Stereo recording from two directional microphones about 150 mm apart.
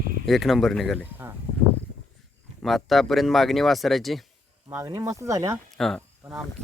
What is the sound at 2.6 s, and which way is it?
Speech, centre (ahead or behind).